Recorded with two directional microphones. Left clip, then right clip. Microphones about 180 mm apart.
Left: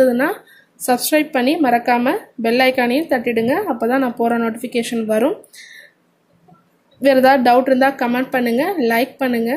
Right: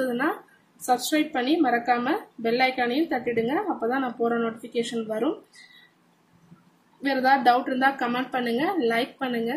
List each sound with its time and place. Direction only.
0.8 s a woman's voice: 40° left (ahead or behind)
7.0 s a woman's voice: 45° left (ahead or behind)